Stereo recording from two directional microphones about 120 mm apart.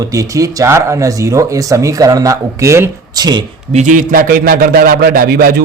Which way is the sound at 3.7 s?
80° right.